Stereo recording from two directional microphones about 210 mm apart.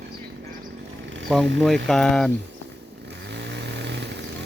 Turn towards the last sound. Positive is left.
turn(degrees=-55)  # may be behind; listen again after turning